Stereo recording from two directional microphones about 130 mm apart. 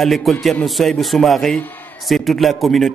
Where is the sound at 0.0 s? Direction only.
Centre (ahead or behind).